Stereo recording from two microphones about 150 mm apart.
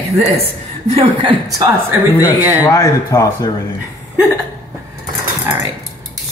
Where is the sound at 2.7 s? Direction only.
25° left (ahead or behind).